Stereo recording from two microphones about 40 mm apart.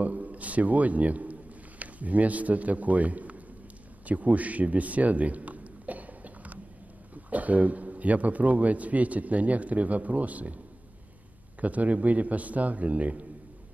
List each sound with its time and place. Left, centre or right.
0.0 s a man's voice: right
4.0 s a sound: right
7.2 s a man's voice: right
11.6 s a man's voice: right